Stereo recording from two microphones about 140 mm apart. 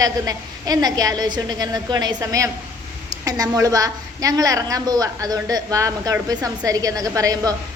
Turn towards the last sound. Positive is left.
turn(degrees=-25)  # may be behind; listen again after turning